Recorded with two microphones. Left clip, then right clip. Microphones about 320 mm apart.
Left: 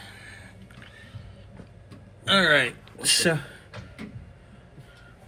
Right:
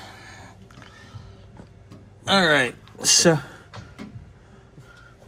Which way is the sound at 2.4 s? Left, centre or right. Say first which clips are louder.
Right 1 dB; centre.